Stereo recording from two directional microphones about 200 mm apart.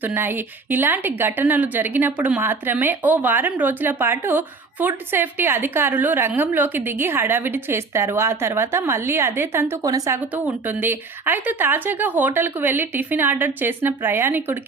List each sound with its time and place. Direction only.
0.0 s a woman's voice: 10° right (ahead or behind)